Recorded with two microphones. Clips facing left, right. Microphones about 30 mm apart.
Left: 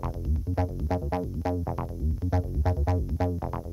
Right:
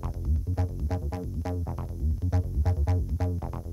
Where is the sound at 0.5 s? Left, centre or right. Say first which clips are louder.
Left 7 dB; centre.